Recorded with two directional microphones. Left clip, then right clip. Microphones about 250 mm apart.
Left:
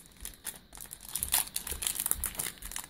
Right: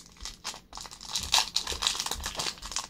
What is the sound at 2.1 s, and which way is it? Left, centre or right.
Crumpling, centre.